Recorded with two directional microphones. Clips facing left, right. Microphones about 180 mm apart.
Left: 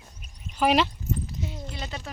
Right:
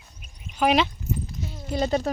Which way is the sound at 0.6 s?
5° left (ahead or behind).